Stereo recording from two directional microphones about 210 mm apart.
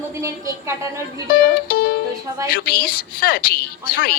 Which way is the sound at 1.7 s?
45° left (ahead or behind).